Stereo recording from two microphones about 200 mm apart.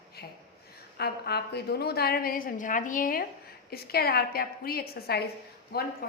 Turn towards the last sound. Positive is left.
turn(degrees=50)  # may be behind; listen again after turning